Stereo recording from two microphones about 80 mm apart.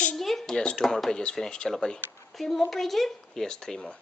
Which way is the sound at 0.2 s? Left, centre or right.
Centre.